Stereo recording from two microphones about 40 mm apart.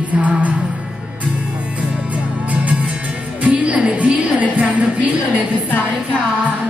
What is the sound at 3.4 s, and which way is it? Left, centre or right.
Music, right.